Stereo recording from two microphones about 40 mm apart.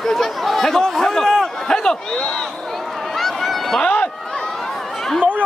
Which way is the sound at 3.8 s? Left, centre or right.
Left.